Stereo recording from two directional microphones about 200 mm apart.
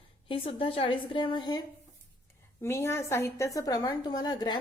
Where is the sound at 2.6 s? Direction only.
15° left (ahead or behind).